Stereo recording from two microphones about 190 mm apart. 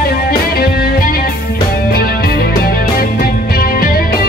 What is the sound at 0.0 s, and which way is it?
Music, 55° left (ahead or behind).